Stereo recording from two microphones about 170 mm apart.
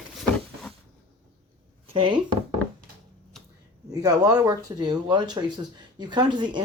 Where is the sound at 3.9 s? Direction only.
20° right (ahead or behind).